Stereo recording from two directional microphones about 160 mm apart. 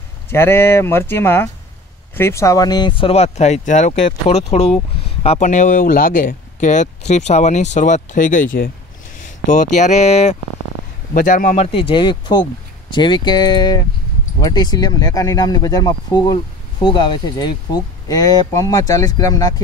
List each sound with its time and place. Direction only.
0.3 s speech: 15° left (ahead or behind); by 10.3 s 45° left (ahead or behind)
11.1 s speech: 55° left (ahead or behind); by 19.5 s 25° left (ahead or behind)